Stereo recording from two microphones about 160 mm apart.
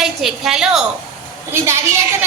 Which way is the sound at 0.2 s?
Centre (ahead or behind).